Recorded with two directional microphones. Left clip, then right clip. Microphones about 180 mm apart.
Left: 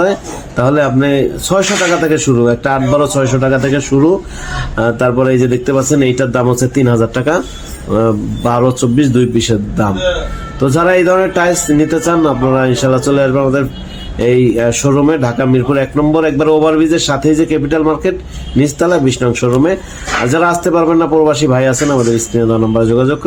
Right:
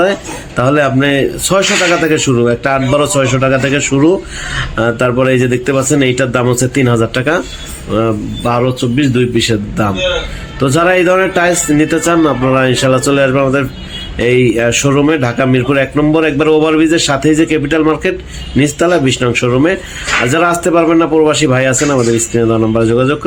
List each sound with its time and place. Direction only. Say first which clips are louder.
0.0 s a man's voice: right 1 dB; centre (ahead or behind)
8.6 s a man's voice: left 2 dB; 30° left (ahead or behind)
10.2 s a man's voice: even; centre (ahead or behind)
21.8 s speech: right 1 dB; 15° right (ahead or behind)
22.1 s a man's voice: right 1 dB; centre (ahead or behind)